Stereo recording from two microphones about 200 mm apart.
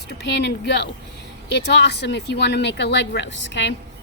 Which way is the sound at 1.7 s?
60° left (ahead or behind).